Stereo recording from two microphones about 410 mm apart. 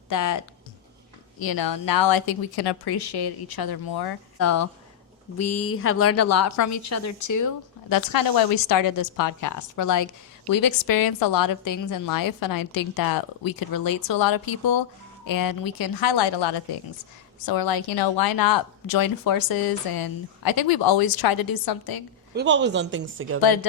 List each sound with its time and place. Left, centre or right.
0.1 s a woman's voice: left
1.4 s speech: left
4.4 s a woman's voice: left
17.4 s speech: left
22.4 s speech: right